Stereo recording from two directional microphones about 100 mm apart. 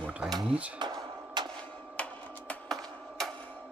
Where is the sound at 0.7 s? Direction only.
45° right (ahead or behind).